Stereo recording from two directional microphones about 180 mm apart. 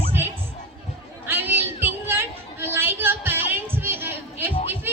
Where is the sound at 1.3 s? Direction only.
10° right (ahead or behind).